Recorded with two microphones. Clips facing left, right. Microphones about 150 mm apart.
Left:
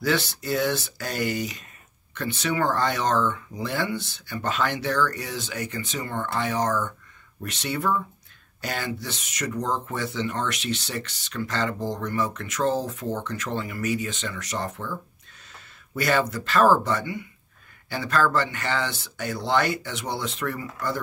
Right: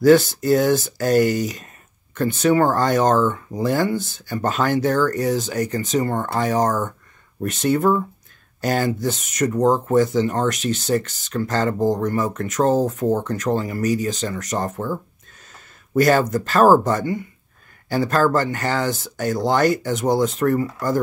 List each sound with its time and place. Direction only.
0.0 s speech: 45° right (ahead or behind)